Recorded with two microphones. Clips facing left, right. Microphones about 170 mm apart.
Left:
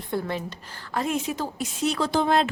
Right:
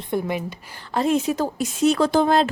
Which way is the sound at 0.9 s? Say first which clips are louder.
Right 6 dB; 30° right (ahead or behind).